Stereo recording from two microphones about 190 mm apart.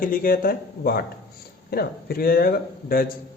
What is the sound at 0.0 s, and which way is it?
A man's voice, 50° left (ahead or behind).